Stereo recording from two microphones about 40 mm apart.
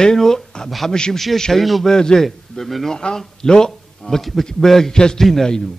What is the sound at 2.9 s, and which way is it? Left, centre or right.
A man's voice, centre.